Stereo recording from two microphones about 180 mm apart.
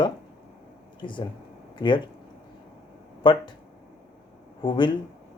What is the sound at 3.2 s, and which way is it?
Speech, 25° left (ahead or behind).